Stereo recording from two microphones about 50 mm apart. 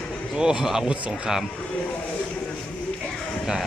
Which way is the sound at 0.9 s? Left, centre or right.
Right.